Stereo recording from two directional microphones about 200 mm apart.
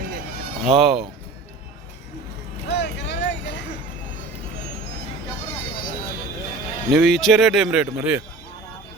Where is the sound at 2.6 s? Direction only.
60° left (ahead or behind).